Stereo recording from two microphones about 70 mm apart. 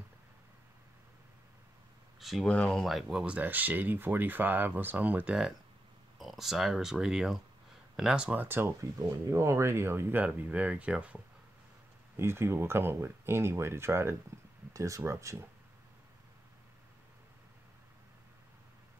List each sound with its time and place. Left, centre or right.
2.1 s a sound: centre
2.4 s speech: centre
2.8 s speech: centre
3.3 s speech: right
6.1 s speech: centre
8.3 s speech: right
9.3 s speech: right
10.2 s speech: right
12.2 s speech: right
14.7 s speech: right